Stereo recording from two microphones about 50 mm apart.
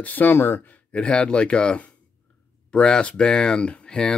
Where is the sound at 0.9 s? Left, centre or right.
Left.